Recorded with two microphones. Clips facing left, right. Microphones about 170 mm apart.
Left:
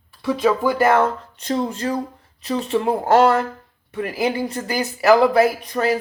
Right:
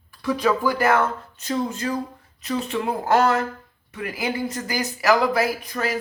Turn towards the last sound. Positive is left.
turn(degrees=30)  # may be behind; listen again after turning